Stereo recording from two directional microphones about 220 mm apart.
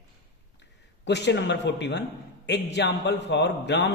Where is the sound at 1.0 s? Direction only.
50° left (ahead or behind).